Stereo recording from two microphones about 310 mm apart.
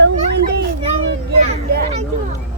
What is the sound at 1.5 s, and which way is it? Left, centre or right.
Speech, right.